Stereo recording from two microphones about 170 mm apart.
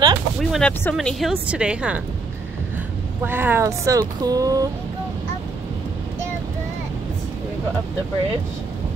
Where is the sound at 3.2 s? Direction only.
10° right (ahead or behind).